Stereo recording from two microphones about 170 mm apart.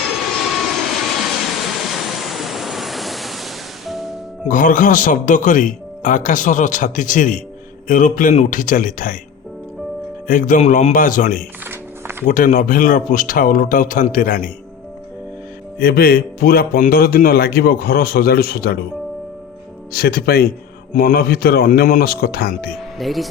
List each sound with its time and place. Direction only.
0.2 s vehicle: centre (ahead or behind)
4.4 s speech: 55° left (ahead or behind)
10.2 s speech: 55° left (ahead or behind)
11.6 s music: 15° right (ahead or behind)
12.2 s speech: 55° left (ahead or behind)
15.8 s speech: 60° left (ahead or behind)
19.9 s speech: 60° left (ahead or behind)
23.0 s speech: centre (ahead or behind)